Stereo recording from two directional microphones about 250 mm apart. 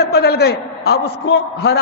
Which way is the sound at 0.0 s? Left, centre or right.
Left.